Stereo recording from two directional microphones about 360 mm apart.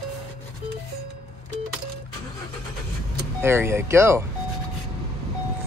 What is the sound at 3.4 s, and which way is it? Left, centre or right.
Speech, centre.